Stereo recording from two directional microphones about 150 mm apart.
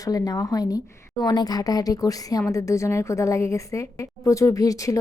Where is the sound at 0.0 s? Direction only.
25° left (ahead or behind).